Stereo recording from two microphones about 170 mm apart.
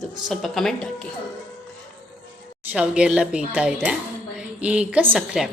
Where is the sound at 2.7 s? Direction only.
5° right (ahead or behind).